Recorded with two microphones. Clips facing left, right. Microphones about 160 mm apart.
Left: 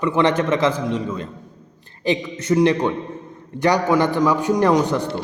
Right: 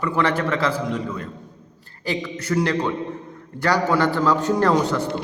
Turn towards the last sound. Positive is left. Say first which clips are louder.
# left 2 dB
turn(degrees=15)  # may be behind; listen again after turning